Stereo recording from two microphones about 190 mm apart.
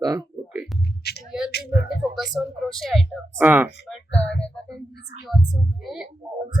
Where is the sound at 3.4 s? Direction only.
10° right (ahead or behind).